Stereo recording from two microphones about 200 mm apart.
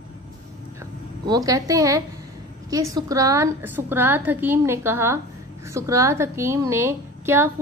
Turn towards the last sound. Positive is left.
turn(degrees=-10)  # may be behind; listen again after turning